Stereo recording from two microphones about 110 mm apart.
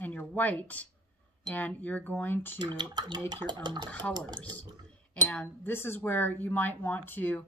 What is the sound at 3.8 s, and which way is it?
Speech, 15° left (ahead or behind).